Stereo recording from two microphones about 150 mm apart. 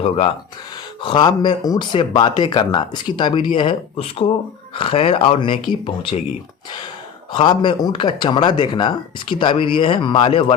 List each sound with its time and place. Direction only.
1.0 s speech: 30° left (ahead or behind)
7.3 s speech: 35° left (ahead or behind)